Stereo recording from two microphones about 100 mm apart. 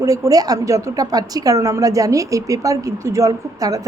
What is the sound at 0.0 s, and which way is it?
A woman's voice, 35° right (ahead or behind).